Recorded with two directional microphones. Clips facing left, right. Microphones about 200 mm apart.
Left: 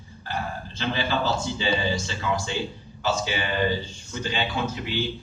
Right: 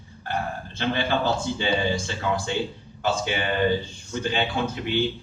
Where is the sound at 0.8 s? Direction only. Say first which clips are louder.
Right 2 dB; 55° right (ahead or behind).